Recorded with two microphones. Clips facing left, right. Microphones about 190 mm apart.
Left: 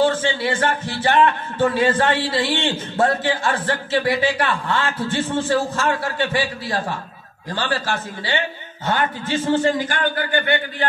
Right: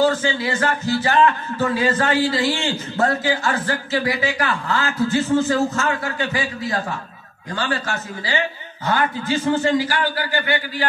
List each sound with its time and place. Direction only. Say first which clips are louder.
0.0 s a man's voice: even; 30° left (ahead or behind)